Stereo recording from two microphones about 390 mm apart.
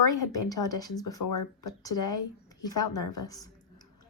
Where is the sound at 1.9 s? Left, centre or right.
Left.